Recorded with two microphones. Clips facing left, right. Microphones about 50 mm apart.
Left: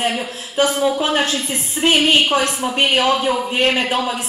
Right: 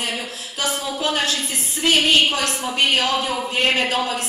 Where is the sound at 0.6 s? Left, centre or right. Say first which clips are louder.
Left 8 dB; left.